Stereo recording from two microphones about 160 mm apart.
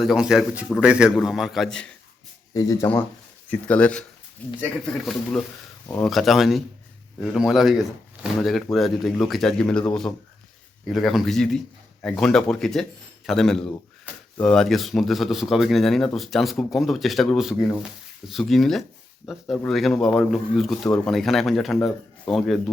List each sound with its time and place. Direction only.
0.0 s speech: centre (ahead or behind)
2.5 s speech: 20° left (ahead or behind); by 5.5 s 5° left (ahead or behind)
5.8 s speech: 15° left (ahead or behind)
6.1 s speech: centre (ahead or behind)